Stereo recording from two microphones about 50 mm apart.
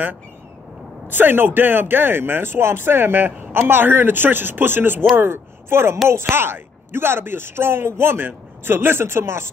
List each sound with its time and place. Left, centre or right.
1.0 s speech: right